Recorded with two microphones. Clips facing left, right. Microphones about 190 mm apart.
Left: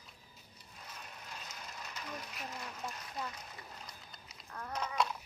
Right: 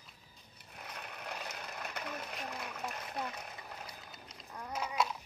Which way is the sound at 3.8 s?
10° right (ahead or behind).